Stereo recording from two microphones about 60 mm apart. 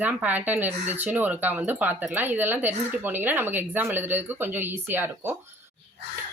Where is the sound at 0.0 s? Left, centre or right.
Right.